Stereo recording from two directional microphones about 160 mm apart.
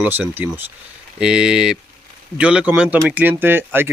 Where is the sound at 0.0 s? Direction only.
10° right (ahead or behind).